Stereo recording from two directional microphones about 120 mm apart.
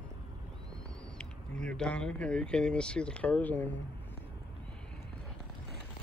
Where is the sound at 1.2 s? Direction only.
10° left (ahead or behind).